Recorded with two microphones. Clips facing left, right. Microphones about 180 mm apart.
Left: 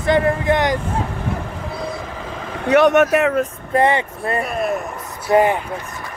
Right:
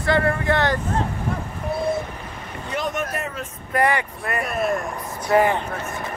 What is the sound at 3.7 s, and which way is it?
Speech, 25° left (ahead or behind).